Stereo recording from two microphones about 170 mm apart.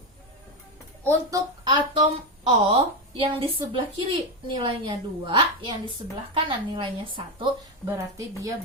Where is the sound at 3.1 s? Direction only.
30° right (ahead or behind).